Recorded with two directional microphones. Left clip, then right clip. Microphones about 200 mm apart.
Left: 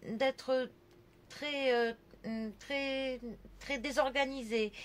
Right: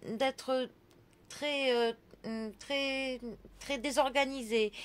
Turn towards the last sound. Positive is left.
turn(degrees=-40)  # may be behind; listen again after turning